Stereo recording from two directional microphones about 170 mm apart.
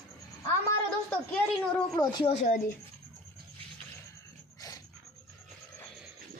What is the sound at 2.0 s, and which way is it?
Speech, 25° left (ahead or behind).